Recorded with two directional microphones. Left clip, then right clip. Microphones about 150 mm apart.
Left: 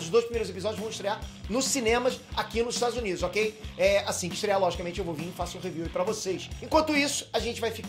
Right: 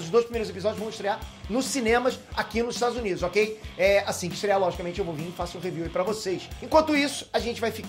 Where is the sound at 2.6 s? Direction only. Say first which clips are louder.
Right 1 dB; 30° left (ahead or behind).